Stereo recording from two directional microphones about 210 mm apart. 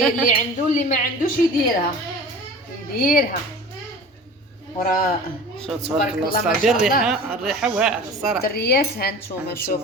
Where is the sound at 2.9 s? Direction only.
45° left (ahead or behind).